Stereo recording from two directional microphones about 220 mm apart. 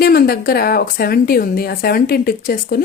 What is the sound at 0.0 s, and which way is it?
A woman's voice, 45° left (ahead or behind).